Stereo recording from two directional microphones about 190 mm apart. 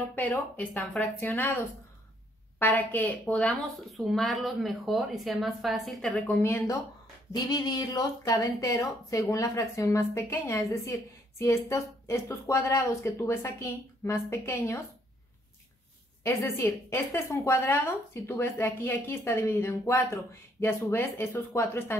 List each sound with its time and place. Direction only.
0.0 s a woman's voice: 10° left (ahead or behind)
2.6 s a woman's voice: 10° left (ahead or behind)
7.3 s a woman's voice: 20° left (ahead or behind)
16.3 s a woman's voice: 10° left (ahead or behind)